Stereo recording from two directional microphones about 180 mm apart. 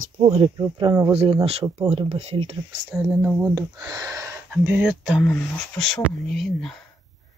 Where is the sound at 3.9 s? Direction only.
20° right (ahead or behind).